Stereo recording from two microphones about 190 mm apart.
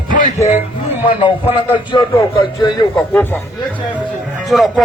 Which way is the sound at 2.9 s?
10° left (ahead or behind).